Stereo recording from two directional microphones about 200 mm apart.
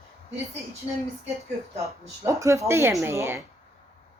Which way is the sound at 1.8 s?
15° right (ahead or behind).